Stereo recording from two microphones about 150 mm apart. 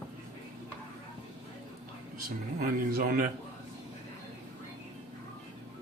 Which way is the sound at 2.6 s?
75° right (ahead or behind).